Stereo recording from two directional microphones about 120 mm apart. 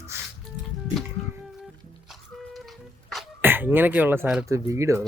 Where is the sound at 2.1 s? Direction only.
Centre (ahead or behind).